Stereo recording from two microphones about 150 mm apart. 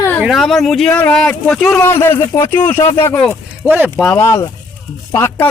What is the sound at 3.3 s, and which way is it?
Speech, 15° right (ahead or behind).